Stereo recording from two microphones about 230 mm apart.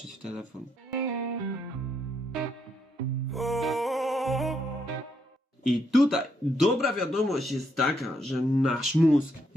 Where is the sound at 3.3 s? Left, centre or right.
Centre.